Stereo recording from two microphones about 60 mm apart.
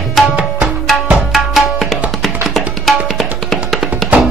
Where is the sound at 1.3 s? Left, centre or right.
Centre.